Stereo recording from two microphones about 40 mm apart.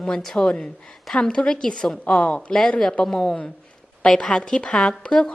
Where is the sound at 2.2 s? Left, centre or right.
Left.